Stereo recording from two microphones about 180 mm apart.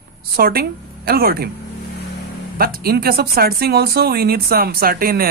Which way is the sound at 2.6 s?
60° right (ahead or behind).